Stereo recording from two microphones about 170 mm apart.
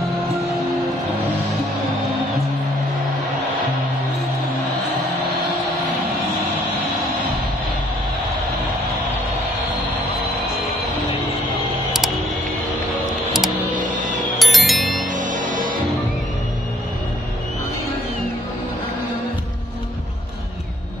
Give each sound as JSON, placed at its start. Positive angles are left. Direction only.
{"t": 14.4, "sound": "music", "side_deg": 0}
{"t": 15.1, "sound": "music", "side_deg": -50}